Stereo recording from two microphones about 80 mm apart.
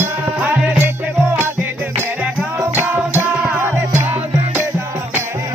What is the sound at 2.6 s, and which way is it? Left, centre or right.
Music, right.